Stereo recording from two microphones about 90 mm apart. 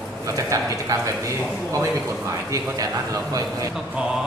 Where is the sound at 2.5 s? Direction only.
40° right (ahead or behind).